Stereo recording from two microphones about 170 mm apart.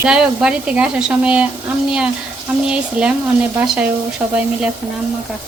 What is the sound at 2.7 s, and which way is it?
Speech, 5° right (ahead or behind).